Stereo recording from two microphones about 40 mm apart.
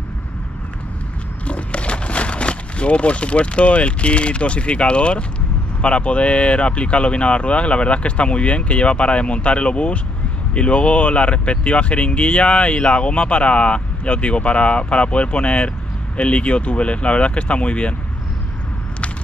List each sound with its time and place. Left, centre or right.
1.4 s speech: left